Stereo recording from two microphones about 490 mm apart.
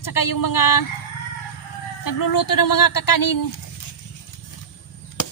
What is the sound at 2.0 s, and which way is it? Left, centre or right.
Speech, left.